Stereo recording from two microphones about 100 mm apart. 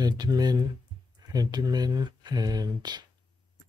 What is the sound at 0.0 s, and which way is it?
Speech, 40° right (ahead or behind).